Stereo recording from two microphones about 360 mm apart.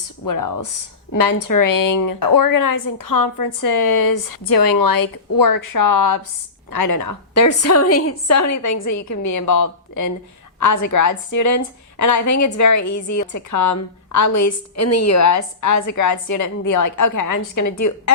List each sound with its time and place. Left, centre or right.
0.3 s a woman's voice: left
6.7 s a woman's voice: left